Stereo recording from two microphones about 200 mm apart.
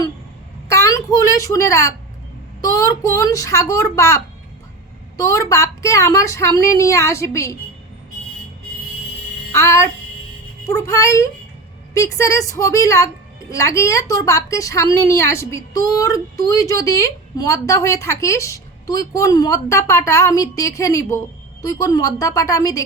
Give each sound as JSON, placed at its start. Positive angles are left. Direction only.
{"t": 0.7, "sound": "a woman's voice", "side_deg": 15}
{"t": 9.5, "sound": "a woman's voice", "side_deg": 15}